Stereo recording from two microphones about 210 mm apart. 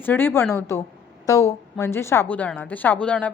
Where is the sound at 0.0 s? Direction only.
10° left (ahead or behind).